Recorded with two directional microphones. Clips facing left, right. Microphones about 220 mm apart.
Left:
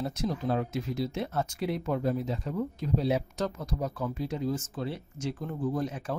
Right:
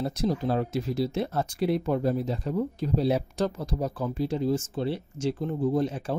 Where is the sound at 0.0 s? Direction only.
35° right (ahead or behind).